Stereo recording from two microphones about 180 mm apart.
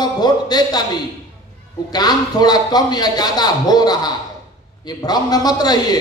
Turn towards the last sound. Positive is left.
turn(degrees=20)  # may be behind; listen again after turning